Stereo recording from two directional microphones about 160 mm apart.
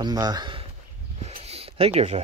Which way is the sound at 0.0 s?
25° right (ahead or behind).